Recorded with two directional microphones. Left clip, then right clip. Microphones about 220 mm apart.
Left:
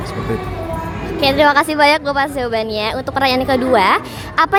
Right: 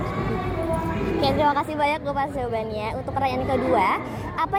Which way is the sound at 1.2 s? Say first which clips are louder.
Left 10 dB; 45° left (ahead or behind).